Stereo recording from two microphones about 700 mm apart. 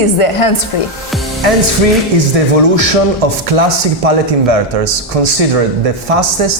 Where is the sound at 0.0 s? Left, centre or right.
Left.